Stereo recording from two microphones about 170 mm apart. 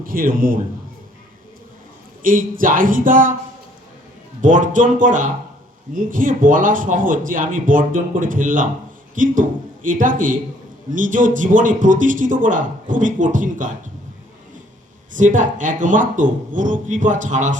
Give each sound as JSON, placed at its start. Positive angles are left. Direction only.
{"t": 0.0, "sound": "a man's voice", "side_deg": -55}
{"t": 2.2, "sound": "speech", "side_deg": -55}
{"t": 4.4, "sound": "speech", "side_deg": -50}
{"t": 15.1, "sound": "speech", "side_deg": -50}